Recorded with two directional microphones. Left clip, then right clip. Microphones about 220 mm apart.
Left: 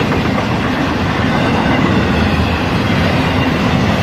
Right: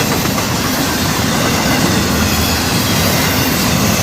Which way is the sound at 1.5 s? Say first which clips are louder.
Even; 45° right (ahead or behind).